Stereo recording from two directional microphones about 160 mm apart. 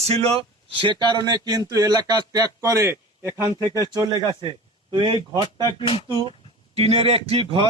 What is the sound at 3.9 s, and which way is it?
A man's voice, 25° right (ahead or behind).